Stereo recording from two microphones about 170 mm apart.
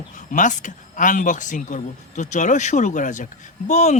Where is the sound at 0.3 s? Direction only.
50° left (ahead or behind).